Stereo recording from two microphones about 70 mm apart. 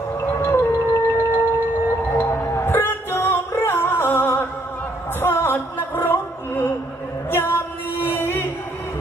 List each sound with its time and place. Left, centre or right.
0.4 s music: left
5.2 s a sound: left
7.2 s music: left